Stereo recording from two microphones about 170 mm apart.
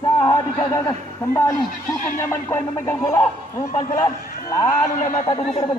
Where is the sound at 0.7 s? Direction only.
15° left (ahead or behind).